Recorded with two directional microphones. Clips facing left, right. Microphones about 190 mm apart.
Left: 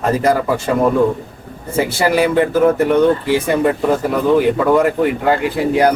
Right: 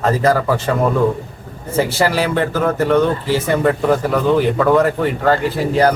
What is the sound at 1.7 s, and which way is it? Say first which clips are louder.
Speech: left 1 dB; 10° left (ahead or behind).